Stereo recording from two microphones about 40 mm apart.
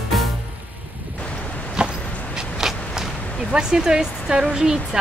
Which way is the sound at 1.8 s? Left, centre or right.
Right.